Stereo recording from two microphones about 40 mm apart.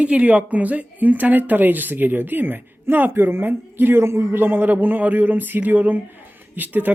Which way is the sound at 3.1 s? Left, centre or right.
Right.